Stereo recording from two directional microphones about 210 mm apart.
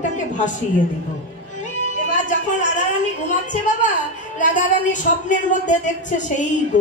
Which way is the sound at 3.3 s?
35° left (ahead or behind).